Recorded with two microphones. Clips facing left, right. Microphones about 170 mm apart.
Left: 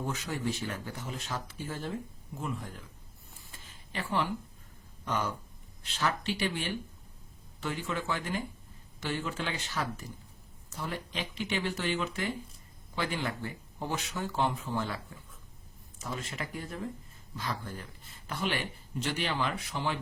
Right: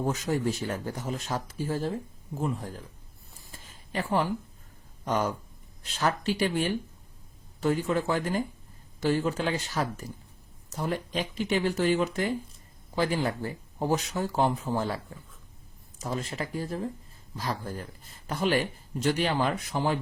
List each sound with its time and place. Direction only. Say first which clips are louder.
0.0 s speech: right 6 dB; 40° right (ahead or behind)
3.5 s a sound: right 7 dB; 40° right (ahead or behind)
5.0 s speech: right 5 dB; 45° right (ahead or behind)